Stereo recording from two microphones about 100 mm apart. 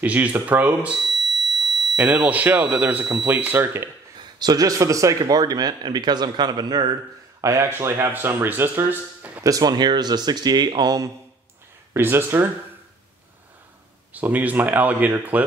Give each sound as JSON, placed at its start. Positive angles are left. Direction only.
{"t": 0.0, "sound": "speech", "side_deg": -15}
{"t": 1.2, "sound": "fire alarm", "side_deg": 0}
{"t": 2.0, "sound": "speech", "side_deg": -15}
{"t": 4.2, "sound": "a man's voice", "side_deg": -40}
{"t": 7.4, "sound": "speech", "side_deg": -30}
{"t": 9.4, "sound": "a man's voice", "side_deg": -35}
{"t": 11.9, "sound": "speech", "side_deg": -25}
{"t": 14.1, "sound": "speech", "side_deg": -15}